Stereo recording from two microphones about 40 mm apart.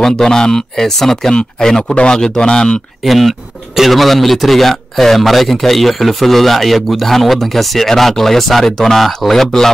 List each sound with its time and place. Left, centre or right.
0.0 s speech: centre
3.1 s a man's voice: centre